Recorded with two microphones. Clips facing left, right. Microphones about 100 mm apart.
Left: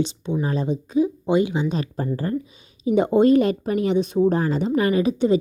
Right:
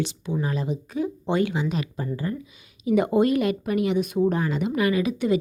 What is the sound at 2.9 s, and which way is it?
A woman's voice, 25° left (ahead or behind).